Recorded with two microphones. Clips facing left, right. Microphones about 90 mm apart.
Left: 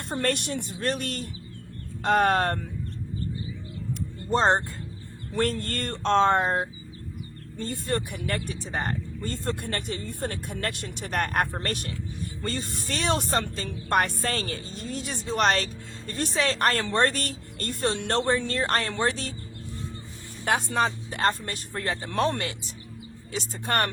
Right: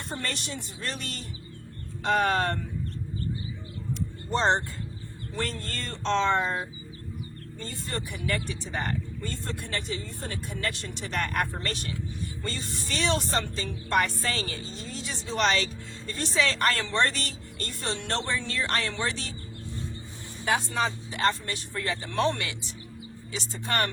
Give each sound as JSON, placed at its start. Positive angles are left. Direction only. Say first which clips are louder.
{"t": 0.1, "sound": "speech", "louder": "left 8 dB", "side_deg": 55}
{"t": 4.3, "sound": "speech", "louder": "left 3 dB", "side_deg": 45}
{"t": 5.3, "sound": "speech", "louder": "left 7 dB", "side_deg": 55}
{"t": 20.4, "sound": "speech", "louder": "left 2 dB", "side_deg": 50}